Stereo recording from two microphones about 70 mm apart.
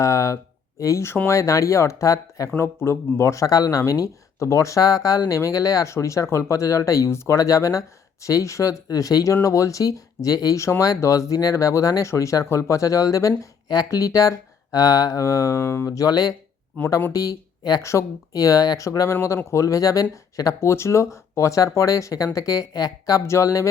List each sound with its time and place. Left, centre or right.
0.0 s speech: left
2.6 s speech: left
10.6 s speech: left
15.5 s speech: left
15.9 s speech: left
17.8 s speech: left
20.6 s speech: left
23.2 s speech: left